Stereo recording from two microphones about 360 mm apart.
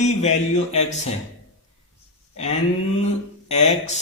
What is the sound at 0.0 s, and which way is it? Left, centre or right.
Speech, centre.